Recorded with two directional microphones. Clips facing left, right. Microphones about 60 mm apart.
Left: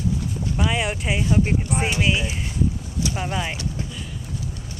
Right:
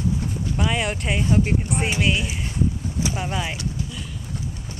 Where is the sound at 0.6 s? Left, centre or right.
Centre.